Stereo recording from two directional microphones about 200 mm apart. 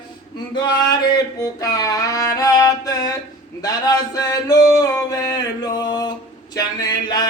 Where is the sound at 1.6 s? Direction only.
20° left (ahead or behind).